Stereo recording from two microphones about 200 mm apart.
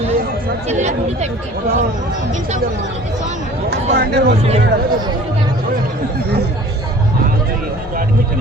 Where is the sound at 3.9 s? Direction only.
55° right (ahead or behind).